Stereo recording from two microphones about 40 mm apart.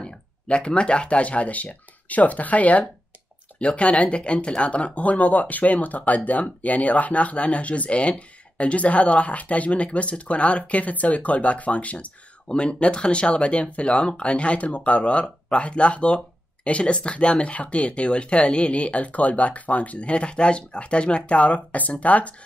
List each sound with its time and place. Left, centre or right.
0.0 s speech: left
12.4 s speech: left